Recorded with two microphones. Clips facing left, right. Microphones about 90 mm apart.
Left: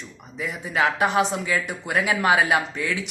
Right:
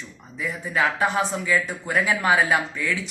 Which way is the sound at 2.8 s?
55° left (ahead or behind).